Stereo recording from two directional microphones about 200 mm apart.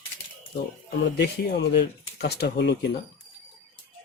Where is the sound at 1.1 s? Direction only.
60° left (ahead or behind).